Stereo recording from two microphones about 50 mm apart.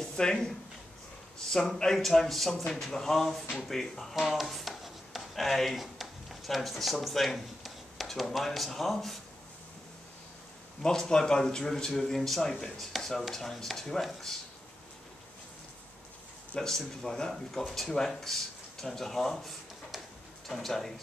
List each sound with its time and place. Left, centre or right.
0.1 s speech: centre
2.5 s speech: centre
10.8 s speech: centre
16.5 s speech: centre